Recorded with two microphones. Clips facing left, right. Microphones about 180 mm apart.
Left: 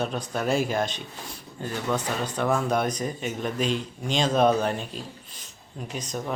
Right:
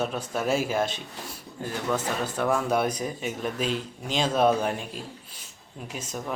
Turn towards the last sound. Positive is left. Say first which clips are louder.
# left 3 dB
turn(degrees=-5)  # may be behind; listen again after turning